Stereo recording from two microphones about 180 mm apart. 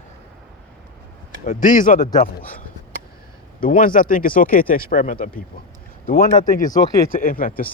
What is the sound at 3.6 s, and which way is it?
Speech, 50° left (ahead or behind).